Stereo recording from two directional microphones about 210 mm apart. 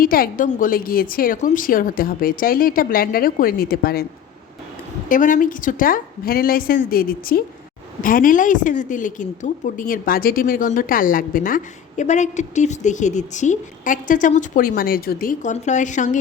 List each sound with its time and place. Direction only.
0.0 s a woman's voice: 45° left (ahead or behind)
5.0 s a woman's voice: 40° left (ahead or behind)